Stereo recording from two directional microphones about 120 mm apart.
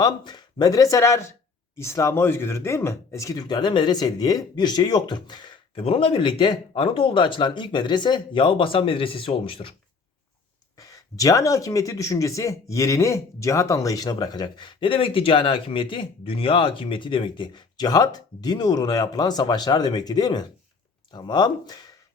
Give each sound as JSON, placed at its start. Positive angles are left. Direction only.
{"t": 0.0, "sound": "speech", "side_deg": 35}
{"t": 10.8, "sound": "speech", "side_deg": 30}